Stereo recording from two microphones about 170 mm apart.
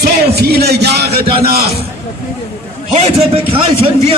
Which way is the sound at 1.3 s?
65° right (ahead or behind).